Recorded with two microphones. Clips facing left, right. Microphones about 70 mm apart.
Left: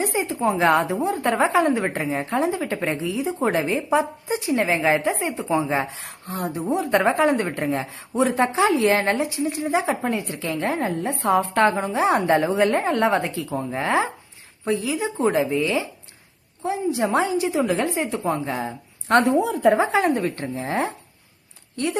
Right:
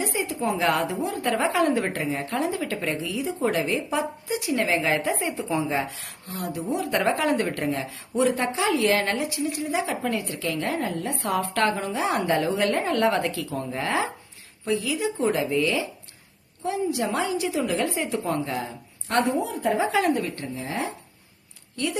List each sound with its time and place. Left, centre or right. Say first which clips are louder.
0.0 s a woman's voice: left 4 dB; left
19.0 s speech: left 6 dB; left
19.9 s a woman's voice: left 2 dB; left
20.2 s speech: left 5 dB; left